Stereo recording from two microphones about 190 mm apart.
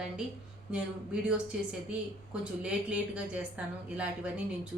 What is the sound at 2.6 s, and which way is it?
A woman's voice, 5° right (ahead or behind).